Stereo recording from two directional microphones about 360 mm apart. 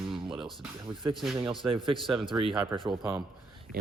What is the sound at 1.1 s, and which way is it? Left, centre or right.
Speech, centre.